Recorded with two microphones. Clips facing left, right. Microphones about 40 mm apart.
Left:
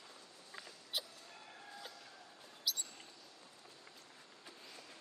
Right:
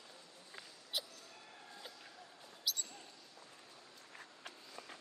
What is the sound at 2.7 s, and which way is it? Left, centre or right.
Basketball bounce, centre.